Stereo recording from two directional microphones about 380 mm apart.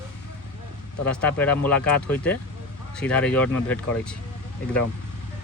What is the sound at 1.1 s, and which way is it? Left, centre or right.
Speech, centre.